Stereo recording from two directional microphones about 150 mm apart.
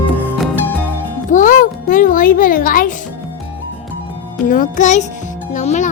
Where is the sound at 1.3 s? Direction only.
60° left (ahead or behind).